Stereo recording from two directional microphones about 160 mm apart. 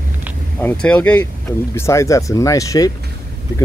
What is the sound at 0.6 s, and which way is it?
Speech, 10° left (ahead or behind).